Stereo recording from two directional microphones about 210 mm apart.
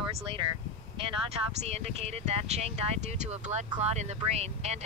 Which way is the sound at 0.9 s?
25° right (ahead or behind).